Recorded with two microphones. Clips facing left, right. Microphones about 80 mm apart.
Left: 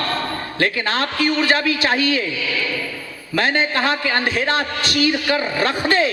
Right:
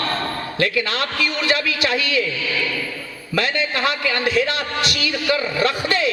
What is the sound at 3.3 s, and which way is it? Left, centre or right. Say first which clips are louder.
A man's voice: left 3 dB; left.